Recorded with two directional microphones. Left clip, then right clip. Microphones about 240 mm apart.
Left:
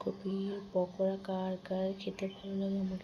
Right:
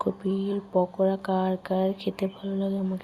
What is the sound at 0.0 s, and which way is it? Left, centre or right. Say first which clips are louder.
Speech: right 10 dB; right.